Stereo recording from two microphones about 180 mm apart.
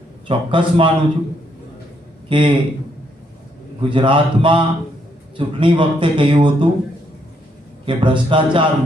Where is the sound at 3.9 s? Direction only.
25° right (ahead or behind).